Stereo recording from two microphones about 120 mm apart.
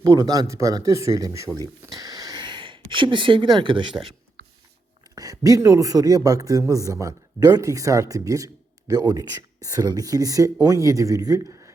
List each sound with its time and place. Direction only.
0.0 s a man's voice: 30° right (ahead or behind)
1.9 s a sound: 30° right (ahead or behind)
5.1 s a man's voice: 30° right (ahead or behind)